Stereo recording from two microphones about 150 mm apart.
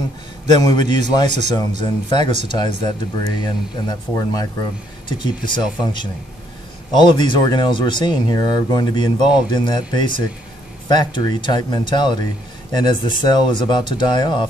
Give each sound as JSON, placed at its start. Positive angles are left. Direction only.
{"t": 0.5, "sound": "speech", "side_deg": 30}